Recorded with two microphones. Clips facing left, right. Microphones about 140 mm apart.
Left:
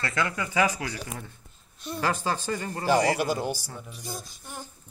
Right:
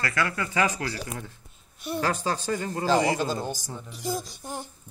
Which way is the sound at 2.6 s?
15° right (ahead or behind).